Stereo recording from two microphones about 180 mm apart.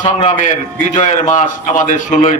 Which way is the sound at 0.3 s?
45° left (ahead or behind).